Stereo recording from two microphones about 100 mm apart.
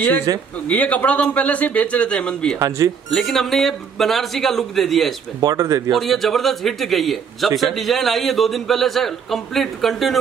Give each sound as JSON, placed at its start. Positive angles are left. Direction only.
{"t": 0.3, "sound": "speech", "side_deg": -40}
{"t": 0.7, "sound": "a man's voice", "side_deg": 15}
{"t": 5.4, "sound": "speech", "side_deg": -35}
{"t": 5.9, "sound": "a man's voice", "side_deg": 0}